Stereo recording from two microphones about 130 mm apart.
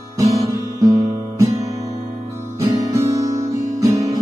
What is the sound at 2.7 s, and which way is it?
Guitar, 25° right (ahead or behind).